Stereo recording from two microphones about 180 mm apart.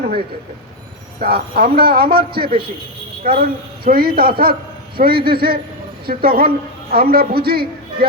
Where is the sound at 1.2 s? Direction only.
60° right (ahead or behind).